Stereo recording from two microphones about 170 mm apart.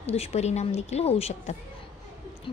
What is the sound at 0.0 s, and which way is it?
A woman's voice, 40° left (ahead or behind).